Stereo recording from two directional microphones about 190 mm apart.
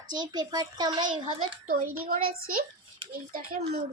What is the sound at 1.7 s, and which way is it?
Speech, 50° right (ahead or behind).